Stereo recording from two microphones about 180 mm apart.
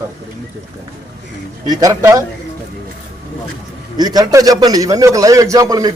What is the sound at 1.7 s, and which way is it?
Speech, 20° right (ahead or behind).